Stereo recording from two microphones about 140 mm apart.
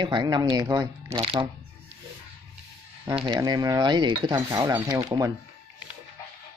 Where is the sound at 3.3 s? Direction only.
30° right (ahead or behind).